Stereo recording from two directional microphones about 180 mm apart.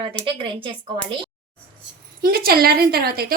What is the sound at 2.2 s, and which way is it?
A woman's voice, 55° right (ahead or behind).